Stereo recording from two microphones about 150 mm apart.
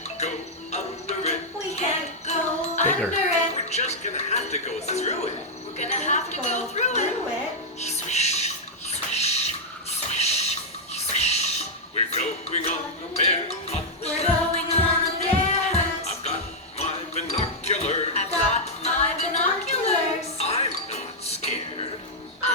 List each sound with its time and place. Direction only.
0.2 s music: 50° left (ahead or behind)
3.1 s speech: 50° left (ahead or behind)
5.7 s a sound: 50° left (ahead or behind)
7.8 s music: 50° left (ahead or behind)
8.9 s a sound: 45° left (ahead or behind)
10.9 s music: 45° left (ahead or behind)